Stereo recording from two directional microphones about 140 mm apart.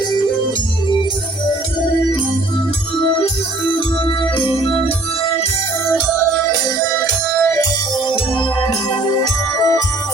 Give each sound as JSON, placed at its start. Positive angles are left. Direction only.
{"t": 9.1, "sound": "music", "side_deg": 25}